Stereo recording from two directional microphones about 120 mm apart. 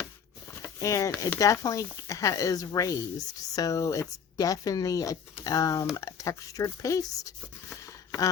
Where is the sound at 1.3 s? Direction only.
25° left (ahead or behind).